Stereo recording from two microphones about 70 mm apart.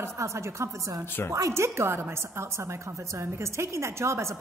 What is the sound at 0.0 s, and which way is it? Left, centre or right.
A woman's voice, right.